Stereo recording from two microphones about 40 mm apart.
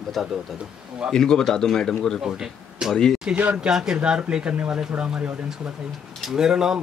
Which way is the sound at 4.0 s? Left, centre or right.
Right.